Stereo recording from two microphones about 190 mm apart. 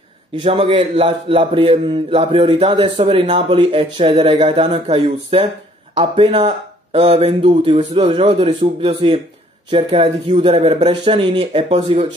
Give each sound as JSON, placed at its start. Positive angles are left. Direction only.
{"t": 0.4, "sound": "speech", "side_deg": -30}